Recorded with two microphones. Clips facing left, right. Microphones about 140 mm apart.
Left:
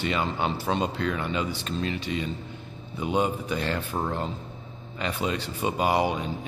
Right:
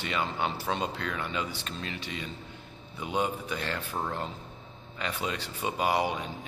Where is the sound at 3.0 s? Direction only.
25° left (ahead or behind).